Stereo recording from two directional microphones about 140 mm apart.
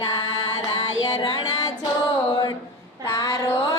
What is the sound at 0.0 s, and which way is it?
Child singing, 30° left (ahead or behind).